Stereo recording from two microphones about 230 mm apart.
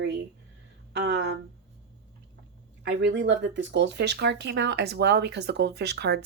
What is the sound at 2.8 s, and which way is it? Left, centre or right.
Speech, right.